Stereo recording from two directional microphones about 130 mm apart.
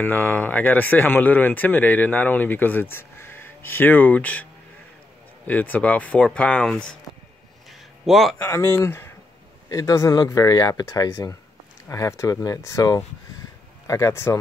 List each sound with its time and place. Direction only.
0.0 s speech: 15° left (ahead or behind)
5.5 s speech: 15° left (ahead or behind)
8.0 s a man's voice: centre (ahead or behind)
8.4 s speech: 20° left (ahead or behind)